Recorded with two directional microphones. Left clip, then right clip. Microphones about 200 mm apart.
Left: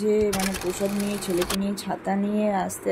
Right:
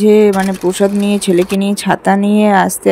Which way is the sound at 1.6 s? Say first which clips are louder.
Right 15 dB; 45° right (ahead or behind).